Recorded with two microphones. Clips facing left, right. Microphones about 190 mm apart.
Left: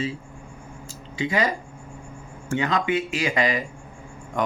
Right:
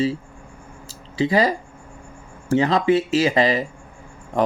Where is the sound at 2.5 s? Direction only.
35° right (ahead or behind).